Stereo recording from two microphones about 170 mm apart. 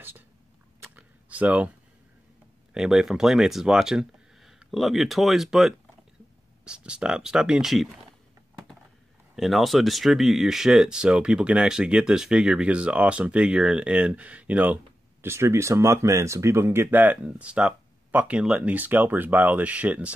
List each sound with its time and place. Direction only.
0.7 s a sound: 10° right (ahead or behind)
2.7 s speech: 5° right (ahead or behind)
9.3 s speech: centre (ahead or behind)